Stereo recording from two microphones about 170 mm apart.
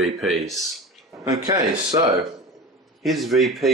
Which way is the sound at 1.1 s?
20° right (ahead or behind).